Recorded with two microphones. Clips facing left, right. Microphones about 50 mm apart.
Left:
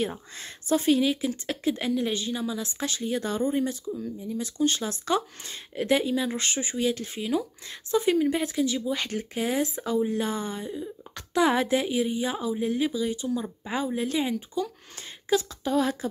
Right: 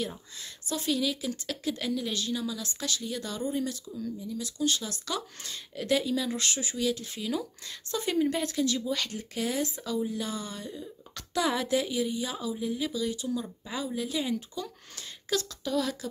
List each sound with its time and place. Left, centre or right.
0.0 s speech: left
4.2 s a woman's voice: left
14.6 s a woman's voice: centre